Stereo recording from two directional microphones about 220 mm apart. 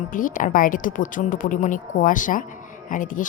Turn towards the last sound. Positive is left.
turn(degrees=35)  # may be behind; listen again after turning